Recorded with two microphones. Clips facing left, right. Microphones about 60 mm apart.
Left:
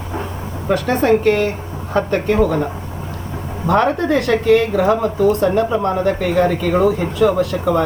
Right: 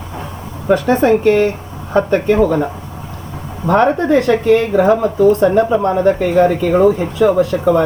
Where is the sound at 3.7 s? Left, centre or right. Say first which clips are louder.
Right 3 dB; right.